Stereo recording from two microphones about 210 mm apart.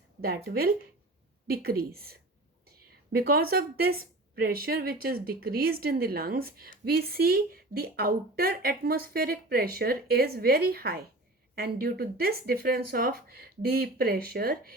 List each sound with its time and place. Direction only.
0.2 s speech: 45° right (ahead or behind)